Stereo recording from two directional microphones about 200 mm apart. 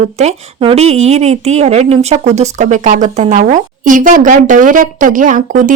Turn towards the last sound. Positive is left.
turn(degrees=-40)  # may be behind; listen again after turning